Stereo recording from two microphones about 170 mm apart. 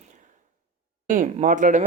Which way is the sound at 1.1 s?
50° right (ahead or behind).